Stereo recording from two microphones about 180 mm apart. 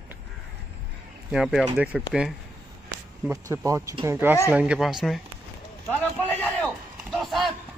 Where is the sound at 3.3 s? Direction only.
20° right (ahead or behind); by 5.2 s centre (ahead or behind).